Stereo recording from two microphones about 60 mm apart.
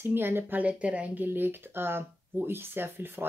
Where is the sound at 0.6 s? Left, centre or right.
Right.